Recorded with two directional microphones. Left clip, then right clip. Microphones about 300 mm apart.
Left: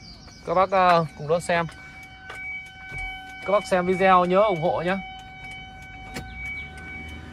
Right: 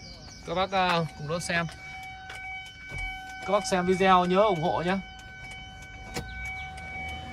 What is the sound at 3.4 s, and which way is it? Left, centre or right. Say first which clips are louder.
Speech: left 4 dB; centre.